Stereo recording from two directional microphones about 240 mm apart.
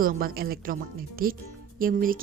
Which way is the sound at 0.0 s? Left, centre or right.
Right.